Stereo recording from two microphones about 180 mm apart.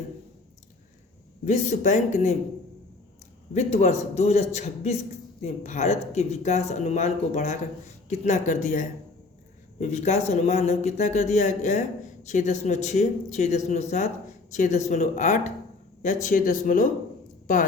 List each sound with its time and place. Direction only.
1.5 s speech: 40° left (ahead or behind)
3.5 s speech: 40° left (ahead or behind)
17.4 s a sound: 50° left (ahead or behind)